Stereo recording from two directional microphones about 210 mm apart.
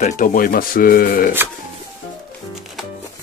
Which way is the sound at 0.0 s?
40° left (ahead or behind).